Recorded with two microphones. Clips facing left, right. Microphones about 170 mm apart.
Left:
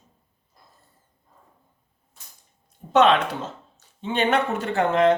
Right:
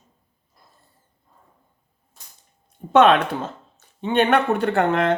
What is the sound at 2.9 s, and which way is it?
Speech, 55° right (ahead or behind).